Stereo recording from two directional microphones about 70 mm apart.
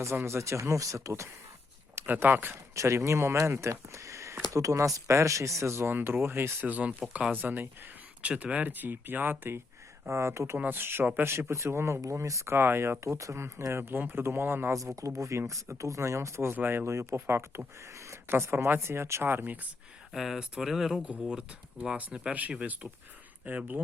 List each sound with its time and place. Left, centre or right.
0.0 s speech: right
2.0 s speech: right
2.7 s speech: right
6.7 s speech: right
10.1 s speech: right
14.7 s speech: right
20.1 s speech: centre; by 23.8 s right